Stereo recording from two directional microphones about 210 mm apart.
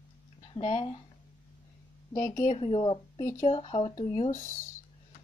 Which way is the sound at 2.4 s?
30° left (ahead or behind).